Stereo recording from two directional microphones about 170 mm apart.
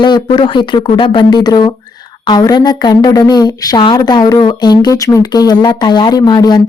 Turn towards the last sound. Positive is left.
turn(degrees=25)  # may be behind; listen again after turning